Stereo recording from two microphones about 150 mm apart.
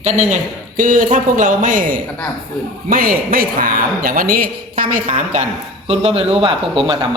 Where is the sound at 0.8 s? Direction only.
60° right (ahead or behind).